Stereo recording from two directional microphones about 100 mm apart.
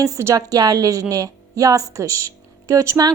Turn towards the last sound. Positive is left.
turn(degrees=-35)  # may be behind; listen again after turning